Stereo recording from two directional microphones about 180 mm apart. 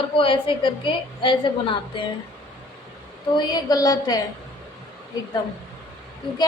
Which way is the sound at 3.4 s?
20° left (ahead or behind).